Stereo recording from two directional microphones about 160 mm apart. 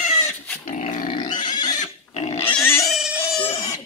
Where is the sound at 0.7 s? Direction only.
55° left (ahead or behind).